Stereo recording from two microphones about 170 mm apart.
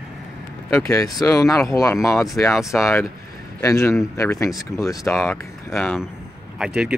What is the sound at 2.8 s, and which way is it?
Speech, 15° left (ahead or behind).